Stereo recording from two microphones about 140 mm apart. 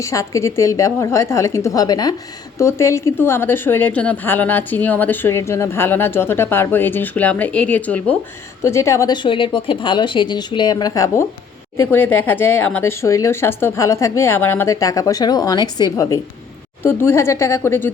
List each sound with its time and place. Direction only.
0.0 s a woman's voice: 25° left (ahead or behind)
16.8 s a woman's voice: 15° left (ahead or behind)